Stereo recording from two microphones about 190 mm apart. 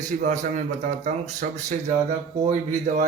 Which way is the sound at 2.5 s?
40° right (ahead or behind).